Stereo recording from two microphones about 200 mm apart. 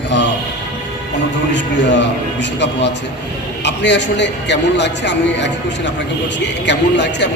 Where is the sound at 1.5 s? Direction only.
60° left (ahead or behind).